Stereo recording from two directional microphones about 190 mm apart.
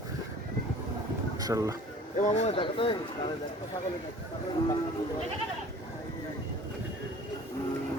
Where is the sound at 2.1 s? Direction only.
35° left (ahead or behind).